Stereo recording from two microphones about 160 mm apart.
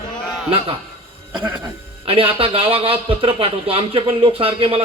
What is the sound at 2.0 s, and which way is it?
Speech, 35° right (ahead or behind).